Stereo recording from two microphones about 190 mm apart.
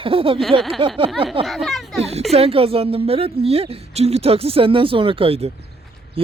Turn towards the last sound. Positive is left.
turn(degrees=-30)  # may be behind; listen again after turning